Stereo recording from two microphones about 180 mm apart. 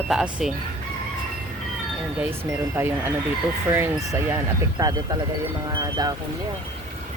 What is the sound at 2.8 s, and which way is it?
Speech, 10° right (ahead or behind).